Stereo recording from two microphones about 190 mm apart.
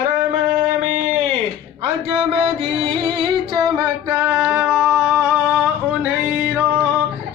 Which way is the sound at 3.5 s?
15° right (ahead or behind).